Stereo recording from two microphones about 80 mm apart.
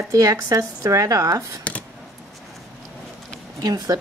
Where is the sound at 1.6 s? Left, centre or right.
Centre.